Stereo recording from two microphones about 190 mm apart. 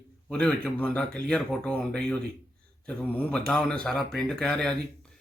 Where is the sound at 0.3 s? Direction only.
5° left (ahead or behind).